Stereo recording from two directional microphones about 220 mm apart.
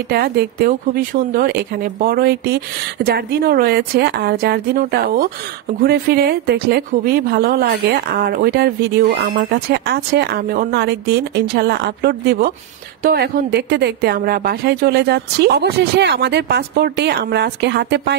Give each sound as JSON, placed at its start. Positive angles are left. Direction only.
{"t": 0.1, "sound": "speech", "side_deg": -45}